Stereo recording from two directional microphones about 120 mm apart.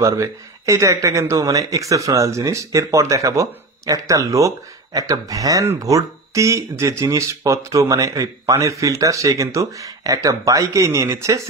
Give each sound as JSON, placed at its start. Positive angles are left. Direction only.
{"t": 0.0, "sound": "speech", "side_deg": -25}